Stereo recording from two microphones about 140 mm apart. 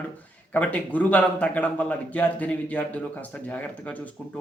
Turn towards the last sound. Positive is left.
turn(degrees=10)  # may be behind; listen again after turning